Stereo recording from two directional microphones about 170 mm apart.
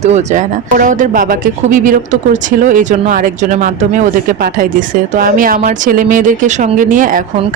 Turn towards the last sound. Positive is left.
turn(degrees=-50)  # may be behind; listen again after turning